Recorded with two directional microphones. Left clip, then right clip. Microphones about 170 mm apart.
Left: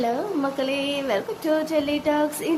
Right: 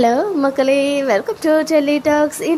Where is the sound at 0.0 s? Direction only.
35° right (ahead or behind).